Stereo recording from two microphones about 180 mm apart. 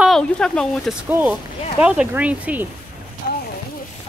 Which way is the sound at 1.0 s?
10° right (ahead or behind).